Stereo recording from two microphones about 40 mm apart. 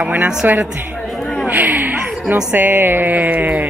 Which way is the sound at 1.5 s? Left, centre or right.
Right.